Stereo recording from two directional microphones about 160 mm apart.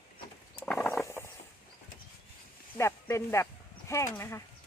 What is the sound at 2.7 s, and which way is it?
Speech, 15° left (ahead or behind).